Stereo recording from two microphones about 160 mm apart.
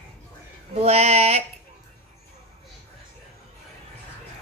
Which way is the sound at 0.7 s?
40° right (ahead or behind).